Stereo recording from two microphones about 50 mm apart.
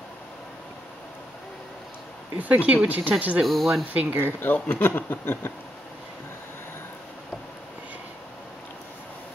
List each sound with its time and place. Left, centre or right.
2.3 s speech: right
3.4 s speech: centre
3.9 s speech: right
4.6 s a sound: left